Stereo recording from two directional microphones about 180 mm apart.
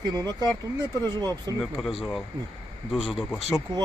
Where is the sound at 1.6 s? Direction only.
Centre (ahead or behind).